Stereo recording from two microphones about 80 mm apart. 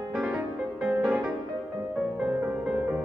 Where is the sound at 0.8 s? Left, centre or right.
Right.